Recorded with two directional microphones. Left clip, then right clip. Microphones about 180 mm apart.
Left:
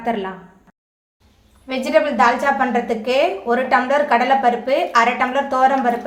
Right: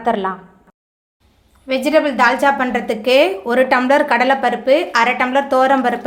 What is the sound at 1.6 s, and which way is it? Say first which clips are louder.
A woman's voice: right 2 dB; 40° right (ahead or behind).